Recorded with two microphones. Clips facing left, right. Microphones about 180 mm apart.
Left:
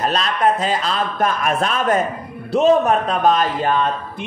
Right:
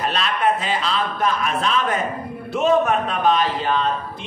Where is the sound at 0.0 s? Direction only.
40° left (ahead or behind).